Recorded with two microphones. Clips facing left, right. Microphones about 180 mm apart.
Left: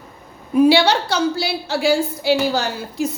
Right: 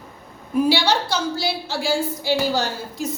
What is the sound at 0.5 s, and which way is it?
A woman's voice, 65° left (ahead or behind).